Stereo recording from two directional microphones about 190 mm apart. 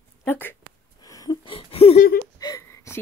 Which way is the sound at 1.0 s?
20° left (ahead or behind).